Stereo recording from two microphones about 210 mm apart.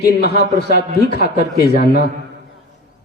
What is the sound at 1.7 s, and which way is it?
Speech, 45° left (ahead or behind).